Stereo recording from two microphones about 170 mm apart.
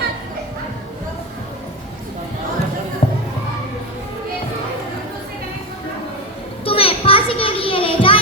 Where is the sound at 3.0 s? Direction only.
35° left (ahead or behind).